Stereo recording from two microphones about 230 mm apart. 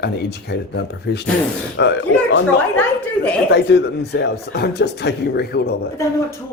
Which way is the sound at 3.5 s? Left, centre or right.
Left.